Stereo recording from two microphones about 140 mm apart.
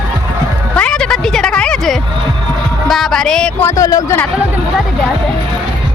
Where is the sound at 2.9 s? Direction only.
Centre (ahead or behind).